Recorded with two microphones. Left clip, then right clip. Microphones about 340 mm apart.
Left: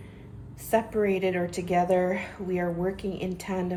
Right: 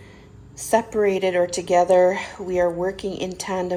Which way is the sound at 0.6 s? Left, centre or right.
Right.